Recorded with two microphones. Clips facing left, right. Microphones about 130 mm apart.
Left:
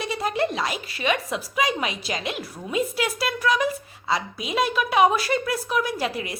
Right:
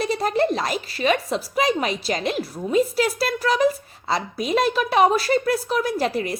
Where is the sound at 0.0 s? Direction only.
40° right (ahead or behind).